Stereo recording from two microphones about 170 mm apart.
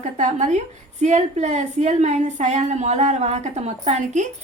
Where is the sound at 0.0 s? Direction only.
45° right (ahead or behind).